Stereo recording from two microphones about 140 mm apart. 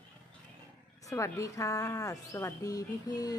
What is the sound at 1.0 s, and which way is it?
Speech, 20° left (ahead or behind).